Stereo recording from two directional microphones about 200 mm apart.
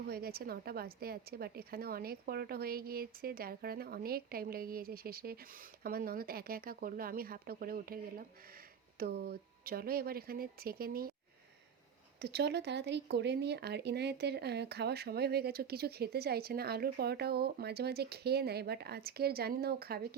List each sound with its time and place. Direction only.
0.1 s speech: 50° right (ahead or behind)
12.2 s speech: 55° right (ahead or behind)